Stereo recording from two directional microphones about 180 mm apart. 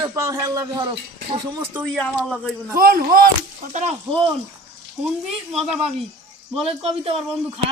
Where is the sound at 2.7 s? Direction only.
55° right (ahead or behind).